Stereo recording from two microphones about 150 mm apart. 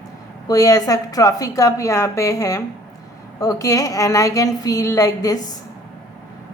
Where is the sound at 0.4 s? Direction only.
25° left (ahead or behind).